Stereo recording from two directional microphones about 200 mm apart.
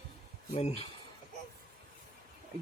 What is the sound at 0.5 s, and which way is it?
Speech, 30° left (ahead or behind).